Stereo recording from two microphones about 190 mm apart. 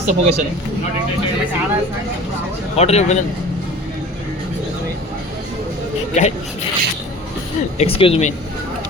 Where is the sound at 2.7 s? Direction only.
35° left (ahead or behind).